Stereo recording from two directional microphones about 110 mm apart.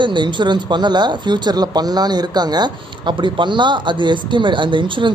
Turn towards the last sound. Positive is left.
turn(degrees=-45)  # may be behind; listen again after turning